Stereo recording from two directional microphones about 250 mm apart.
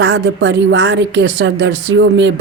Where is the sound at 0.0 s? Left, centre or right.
Right.